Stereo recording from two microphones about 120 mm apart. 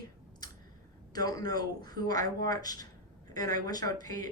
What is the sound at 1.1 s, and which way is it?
Speech, 35° left (ahead or behind).